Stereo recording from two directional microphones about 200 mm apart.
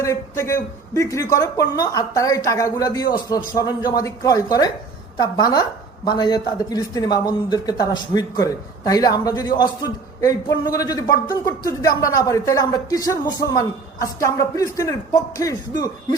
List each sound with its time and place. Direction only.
0.0 s speech: 15° left (ahead or behind)